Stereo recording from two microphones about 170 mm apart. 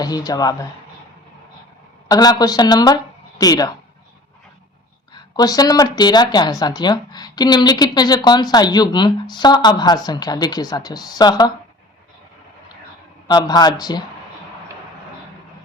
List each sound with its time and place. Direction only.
0.0 s speech: 20° left (ahead or behind)
2.0 s speech: 20° left (ahead or behind)
5.1 s speech: 20° left (ahead or behind)
13.2 s speech: 25° left (ahead or behind)